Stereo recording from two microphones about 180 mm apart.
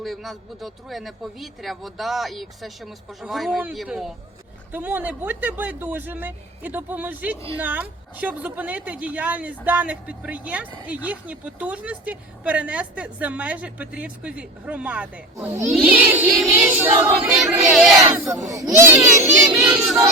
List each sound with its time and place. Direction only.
0.0 s a man's voice: centre (ahead or behind)
18.2 s a woman's voice: 15° right (ahead or behind)